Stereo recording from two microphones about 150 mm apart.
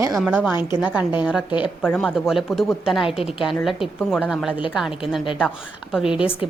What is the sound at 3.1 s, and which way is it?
Speech, 40° left (ahead or behind).